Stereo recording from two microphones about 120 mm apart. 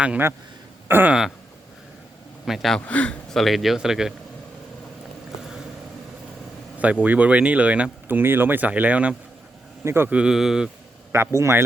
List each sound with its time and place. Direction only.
0.0 s speech: 10° right (ahead or behind)
0.9 s a sound: 15° right (ahead or behind)
2.5 s speech: centre (ahead or behind)
2.8 s speech: 10° left (ahead or behind); by 4.1 s 5° right (ahead or behind)
7.0 s speech: 10° right (ahead or behind)
11.1 s a man's voice: 25° right (ahead or behind)